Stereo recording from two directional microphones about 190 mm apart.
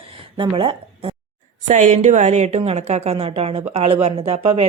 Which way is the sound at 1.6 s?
40° right (ahead or behind).